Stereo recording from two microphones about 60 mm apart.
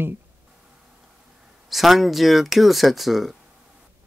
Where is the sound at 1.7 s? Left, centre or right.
Centre.